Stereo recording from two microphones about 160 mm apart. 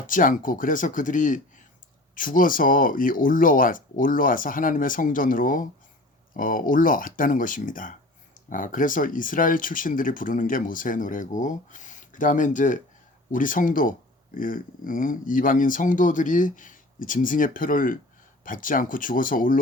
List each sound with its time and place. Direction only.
0.1 s speech: 55° left (ahead or behind)